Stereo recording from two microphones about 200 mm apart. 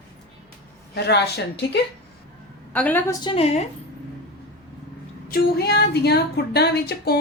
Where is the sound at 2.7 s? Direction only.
10° left (ahead or behind).